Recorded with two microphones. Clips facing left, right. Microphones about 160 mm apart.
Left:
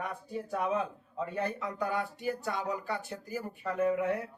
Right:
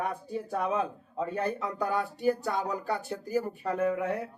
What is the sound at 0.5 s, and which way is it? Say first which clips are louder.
Speech: right 2 dB; 35° right (ahead or behind).